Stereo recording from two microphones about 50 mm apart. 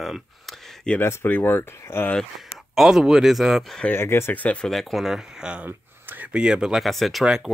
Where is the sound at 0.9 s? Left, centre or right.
Centre.